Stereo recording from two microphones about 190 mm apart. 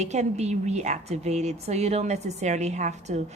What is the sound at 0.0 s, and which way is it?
A woman's voice, 35° right (ahead or behind).